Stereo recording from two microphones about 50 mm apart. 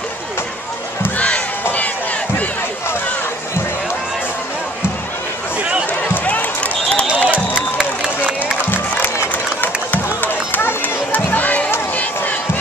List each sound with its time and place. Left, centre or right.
1.1 s crowd: left
6.2 s run: left
7.7 s a sound: centre
9.6 s run: left